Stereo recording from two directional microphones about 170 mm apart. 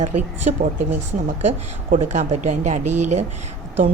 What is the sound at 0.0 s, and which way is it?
Speech, 45° right (ahead or behind).